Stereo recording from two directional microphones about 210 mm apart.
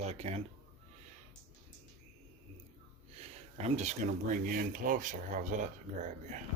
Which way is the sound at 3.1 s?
30° right (ahead or behind).